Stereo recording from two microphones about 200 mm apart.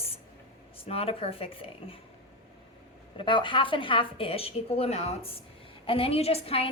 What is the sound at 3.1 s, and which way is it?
A woman's voice, 25° left (ahead or behind).